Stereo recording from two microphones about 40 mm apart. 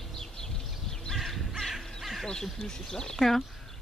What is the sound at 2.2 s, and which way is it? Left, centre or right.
Speech, centre.